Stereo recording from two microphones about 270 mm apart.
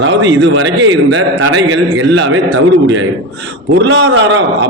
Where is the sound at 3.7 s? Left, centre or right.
Right.